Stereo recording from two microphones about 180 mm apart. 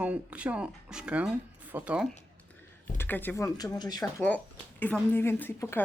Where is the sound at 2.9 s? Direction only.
10° left (ahead or behind).